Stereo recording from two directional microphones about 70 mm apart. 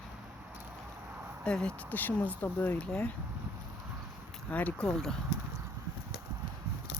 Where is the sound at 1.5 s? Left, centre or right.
Centre.